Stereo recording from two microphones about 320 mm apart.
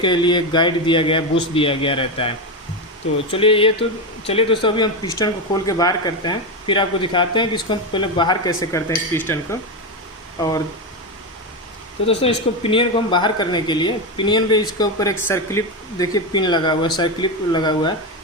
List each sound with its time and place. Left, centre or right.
0.0 s speech: centre
3.3 s speech: centre
12.6 s speech: centre